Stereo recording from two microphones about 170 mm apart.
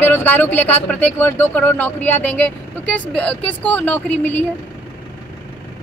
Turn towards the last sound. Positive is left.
turn(degrees=10)  # may be behind; listen again after turning